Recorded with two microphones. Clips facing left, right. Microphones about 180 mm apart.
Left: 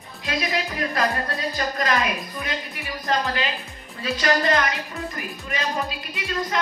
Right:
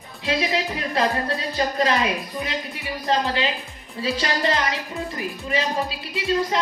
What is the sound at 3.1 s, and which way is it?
A woman's voice, 30° right (ahead or behind).